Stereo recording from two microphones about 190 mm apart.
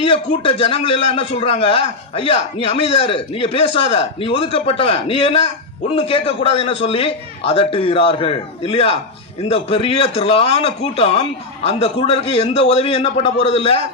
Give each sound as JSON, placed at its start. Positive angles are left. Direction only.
{"t": 0.1, "sound": "a man's voice", "side_deg": 30}